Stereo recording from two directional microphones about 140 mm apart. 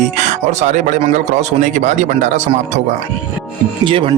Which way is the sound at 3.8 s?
40° right (ahead or behind).